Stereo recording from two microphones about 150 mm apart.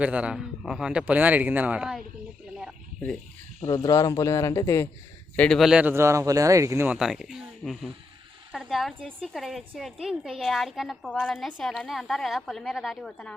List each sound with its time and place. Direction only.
0.0 s speech: 10° right (ahead or behind)
3.7 s a man's voice: 25° left (ahead or behind)
5.4 s a woman's voice: centre (ahead or behind)